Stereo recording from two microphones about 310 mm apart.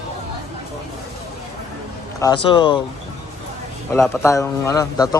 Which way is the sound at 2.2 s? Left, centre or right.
Centre.